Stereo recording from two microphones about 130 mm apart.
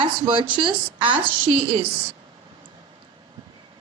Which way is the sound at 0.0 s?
40° right (ahead or behind).